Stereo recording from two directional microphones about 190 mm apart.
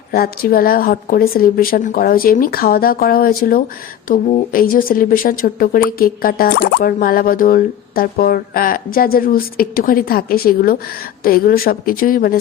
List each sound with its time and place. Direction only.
0.1 s speech: 50° left (ahead or behind)